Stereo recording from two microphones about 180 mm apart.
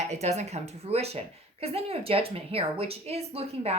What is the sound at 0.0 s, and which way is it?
Speech, 40° right (ahead or behind).